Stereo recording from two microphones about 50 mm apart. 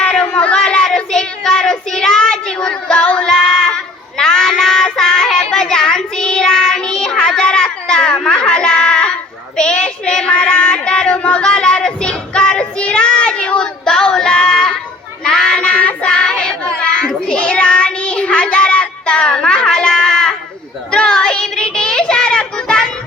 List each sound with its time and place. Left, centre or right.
0.3 s child singing: left
13.8 s child singing: centre